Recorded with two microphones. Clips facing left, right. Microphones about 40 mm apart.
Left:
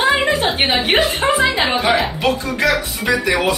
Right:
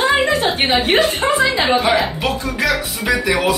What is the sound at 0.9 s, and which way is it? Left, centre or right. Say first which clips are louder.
A man's voice: even; centre.